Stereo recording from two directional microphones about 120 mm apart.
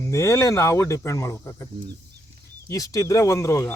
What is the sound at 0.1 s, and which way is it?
Speech, 25° left (ahead or behind).